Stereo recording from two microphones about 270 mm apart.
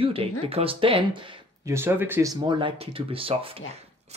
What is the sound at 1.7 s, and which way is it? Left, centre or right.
Speech, centre.